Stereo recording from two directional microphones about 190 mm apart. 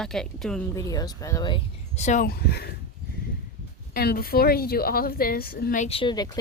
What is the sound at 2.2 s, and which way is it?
Speech, 55° left (ahead or behind).